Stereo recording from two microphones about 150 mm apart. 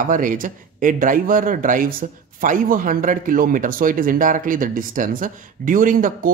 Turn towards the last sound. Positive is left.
turn(degrees=-65)  # may be behind; listen again after turning